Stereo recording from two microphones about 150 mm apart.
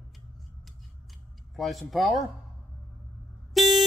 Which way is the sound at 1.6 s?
Centre (ahead or behind).